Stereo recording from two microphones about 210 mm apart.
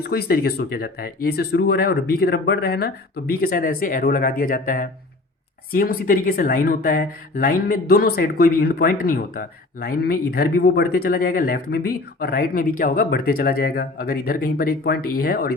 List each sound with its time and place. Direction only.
0.1 s speech: 50° left (ahead or behind)